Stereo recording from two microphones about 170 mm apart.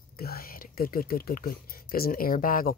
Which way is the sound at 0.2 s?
60° left (ahead or behind).